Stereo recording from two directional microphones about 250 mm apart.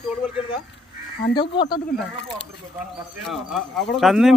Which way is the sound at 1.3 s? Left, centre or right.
Centre.